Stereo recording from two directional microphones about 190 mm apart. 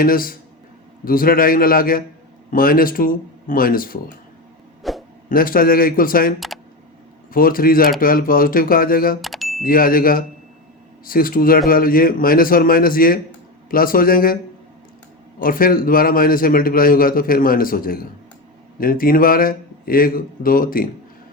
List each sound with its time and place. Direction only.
0.0 s a man's voice: 50° left (ahead or behind)
4.8 s a sound: centre (ahead or behind)
5.3 s a man's voice: 50° left (ahead or behind)
7.3 s a man's voice: 50° left (ahead or behind)
9.2 s a sound: centre (ahead or behind)
9.6 s a man's voice: 50° left (ahead or behind)
15.4 s a man's voice: 50° left (ahead or behind)